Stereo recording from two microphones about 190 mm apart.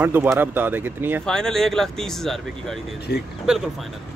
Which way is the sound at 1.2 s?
5° left (ahead or behind).